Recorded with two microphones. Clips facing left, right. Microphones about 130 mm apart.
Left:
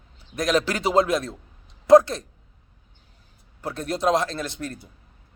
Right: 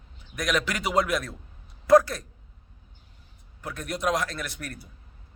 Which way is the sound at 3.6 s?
30° left (ahead or behind).